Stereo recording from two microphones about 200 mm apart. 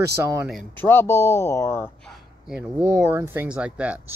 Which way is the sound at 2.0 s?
Centre (ahead or behind).